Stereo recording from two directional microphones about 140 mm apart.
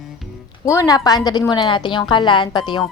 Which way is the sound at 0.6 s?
20° left (ahead or behind).